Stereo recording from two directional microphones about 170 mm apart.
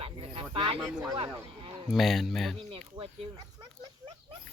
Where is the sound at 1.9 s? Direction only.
Centre (ahead or behind).